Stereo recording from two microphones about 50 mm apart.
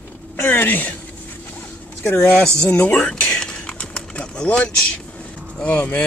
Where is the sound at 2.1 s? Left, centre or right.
Centre.